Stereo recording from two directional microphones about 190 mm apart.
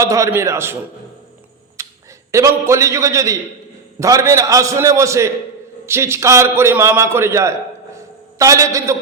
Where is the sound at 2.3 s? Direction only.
15° right (ahead or behind).